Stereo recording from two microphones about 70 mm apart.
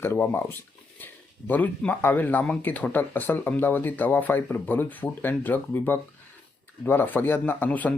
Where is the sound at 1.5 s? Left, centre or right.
Left.